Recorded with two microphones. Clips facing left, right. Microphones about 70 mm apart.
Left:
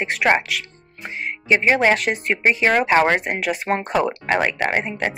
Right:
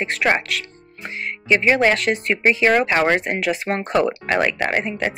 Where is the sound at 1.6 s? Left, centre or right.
Centre.